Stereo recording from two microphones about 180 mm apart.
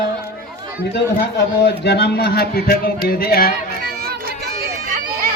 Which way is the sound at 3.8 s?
60° right (ahead or behind).